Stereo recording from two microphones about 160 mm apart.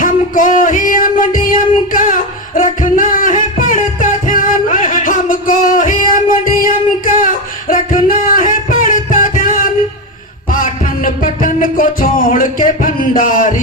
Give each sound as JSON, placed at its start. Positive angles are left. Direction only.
{"t": 0.0, "sound": "music", "side_deg": 55}